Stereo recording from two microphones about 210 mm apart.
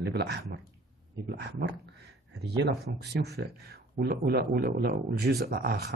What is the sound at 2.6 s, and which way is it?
Speech, 50° right (ahead or behind).